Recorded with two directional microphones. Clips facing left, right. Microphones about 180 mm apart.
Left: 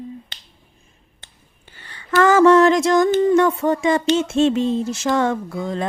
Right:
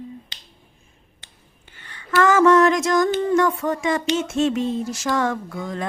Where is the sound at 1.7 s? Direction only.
35° left (ahead or behind).